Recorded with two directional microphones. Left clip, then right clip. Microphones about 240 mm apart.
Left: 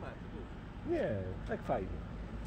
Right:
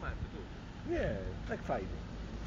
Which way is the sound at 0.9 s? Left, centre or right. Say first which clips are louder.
Left 1 dB; centre.